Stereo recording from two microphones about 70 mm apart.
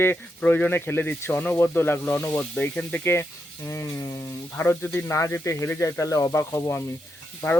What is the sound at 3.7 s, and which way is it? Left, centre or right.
Speech, left.